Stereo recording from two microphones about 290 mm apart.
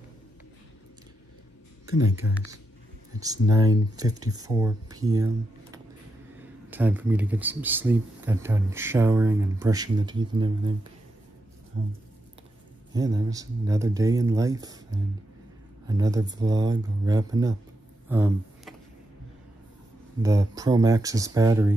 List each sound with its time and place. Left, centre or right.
2.2 s speech: left
3.2 s speech: centre
6.7 s speech: centre
11.7 s speech: right
12.9 s speech: centre
18.0 s a sound: centre
20.2 s speech: centre